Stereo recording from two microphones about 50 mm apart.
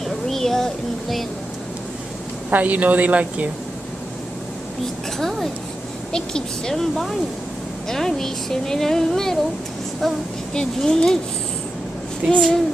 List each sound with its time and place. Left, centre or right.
0.0 s a sound: centre
2.5 s a woman's voice: right
6.1 s a woman's voice: centre
10.5 s a woman's voice: centre
12.3 s a woman's voice: centre